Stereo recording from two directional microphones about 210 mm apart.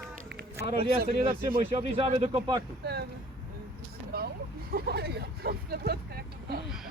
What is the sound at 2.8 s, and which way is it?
Speech, 50° right (ahead or behind).